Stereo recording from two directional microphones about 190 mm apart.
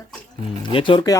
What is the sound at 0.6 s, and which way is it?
Speech, 25° left (ahead or behind).